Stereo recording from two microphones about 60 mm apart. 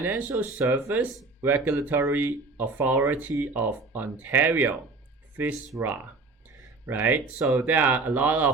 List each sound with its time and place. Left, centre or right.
0.2 s speech: right
5.7 s speech: right